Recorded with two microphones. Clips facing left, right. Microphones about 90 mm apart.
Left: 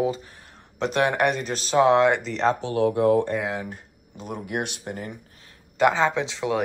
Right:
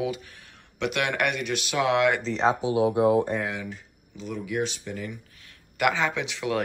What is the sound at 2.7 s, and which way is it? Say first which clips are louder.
Speech: left 2 dB; 15° right (ahead or behind).